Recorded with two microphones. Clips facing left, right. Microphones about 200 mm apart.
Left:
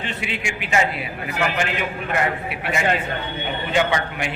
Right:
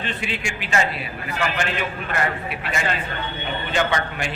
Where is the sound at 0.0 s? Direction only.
15° left (ahead or behind).